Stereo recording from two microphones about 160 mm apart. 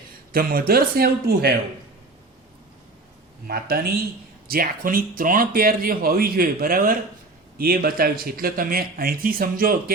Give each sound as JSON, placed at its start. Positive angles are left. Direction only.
{"t": 0.3, "sound": "speech", "side_deg": -70}
{"t": 3.4, "sound": "speech", "side_deg": -75}